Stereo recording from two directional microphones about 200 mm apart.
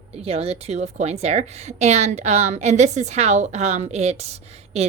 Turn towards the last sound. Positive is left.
turn(degrees=-30)  # may be behind; listen again after turning